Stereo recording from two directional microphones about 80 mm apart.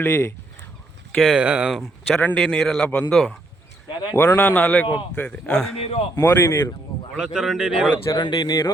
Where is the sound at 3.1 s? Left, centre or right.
Centre.